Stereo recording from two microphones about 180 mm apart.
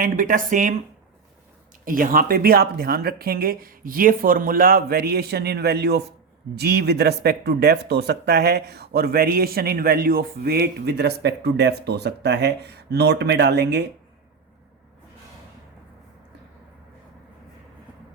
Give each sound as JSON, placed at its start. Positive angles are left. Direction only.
{"t": 0.0, "sound": "speech", "side_deg": -50}
{"t": 1.8, "sound": "speech", "side_deg": -50}